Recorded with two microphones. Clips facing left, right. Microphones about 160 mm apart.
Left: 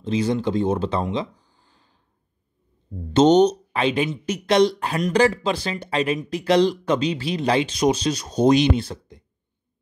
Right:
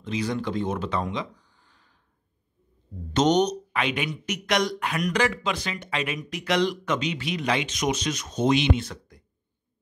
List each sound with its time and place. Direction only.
0.0 s speech: 30° left (ahead or behind)
3.1 s speech: 30° left (ahead or behind)